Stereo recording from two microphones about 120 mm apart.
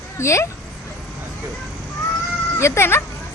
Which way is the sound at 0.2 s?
25° left (ahead or behind).